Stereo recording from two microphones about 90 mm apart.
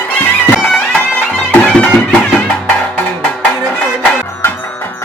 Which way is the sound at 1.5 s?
20° left (ahead or behind).